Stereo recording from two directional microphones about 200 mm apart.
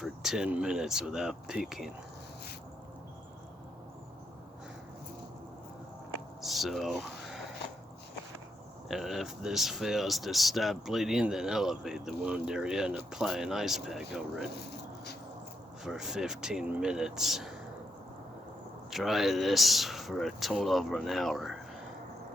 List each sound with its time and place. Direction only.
0.0 s speech: centre (ahead or behind)
6.4 s speech: centre (ahead or behind)
8.9 s speech: centre (ahead or behind)
15.8 s speech: centre (ahead or behind)
18.9 s speech: centre (ahead or behind)